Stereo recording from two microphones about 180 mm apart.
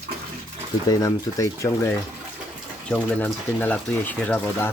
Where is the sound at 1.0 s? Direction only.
20° left (ahead or behind).